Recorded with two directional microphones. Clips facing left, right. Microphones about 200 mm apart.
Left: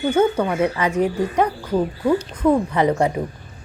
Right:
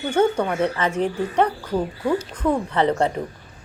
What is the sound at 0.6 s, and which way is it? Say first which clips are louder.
Speech: left 3 dB; 10° left (ahead or behind).